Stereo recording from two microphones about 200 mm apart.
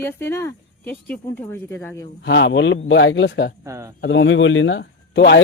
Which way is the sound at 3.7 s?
15° right (ahead or behind).